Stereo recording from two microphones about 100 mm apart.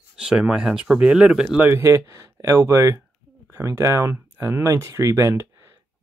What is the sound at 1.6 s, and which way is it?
Speech, 25° right (ahead or behind).